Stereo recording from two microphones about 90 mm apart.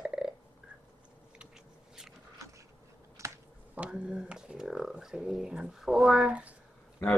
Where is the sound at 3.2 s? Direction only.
35° right (ahead or behind).